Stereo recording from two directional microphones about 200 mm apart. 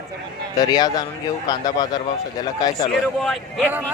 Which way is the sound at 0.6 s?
20° left (ahead or behind).